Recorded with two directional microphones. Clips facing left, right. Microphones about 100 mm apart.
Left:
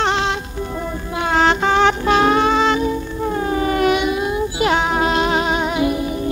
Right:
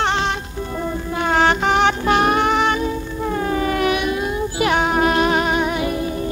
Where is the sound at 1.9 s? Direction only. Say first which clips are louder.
Left 2 dB; 25° left (ahead or behind).